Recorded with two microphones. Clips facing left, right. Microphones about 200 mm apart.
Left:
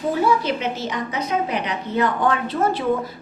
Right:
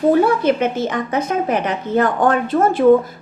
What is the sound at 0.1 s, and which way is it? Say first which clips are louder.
A woman's voice: right 4 dB; 55° right (ahead or behind).